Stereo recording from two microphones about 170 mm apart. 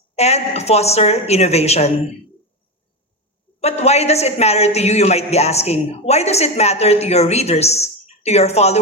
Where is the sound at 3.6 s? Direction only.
40° left (ahead or behind).